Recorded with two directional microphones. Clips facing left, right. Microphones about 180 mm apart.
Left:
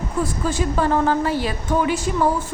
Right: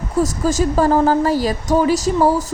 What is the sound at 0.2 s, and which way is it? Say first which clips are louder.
A woman's voice: right 6 dB; 40° right (ahead or behind).